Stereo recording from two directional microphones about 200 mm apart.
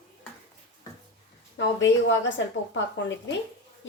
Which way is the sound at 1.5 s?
65° left (ahead or behind).